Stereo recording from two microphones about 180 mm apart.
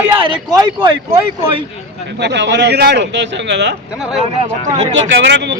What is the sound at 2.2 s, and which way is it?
Speech, 70° right (ahead or behind).